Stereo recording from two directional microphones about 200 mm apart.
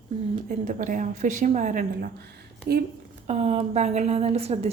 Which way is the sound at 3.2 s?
30° right (ahead or behind).